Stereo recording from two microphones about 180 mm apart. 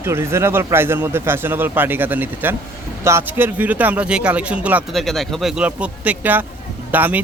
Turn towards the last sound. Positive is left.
turn(degrees=-10)  # may be behind; listen again after turning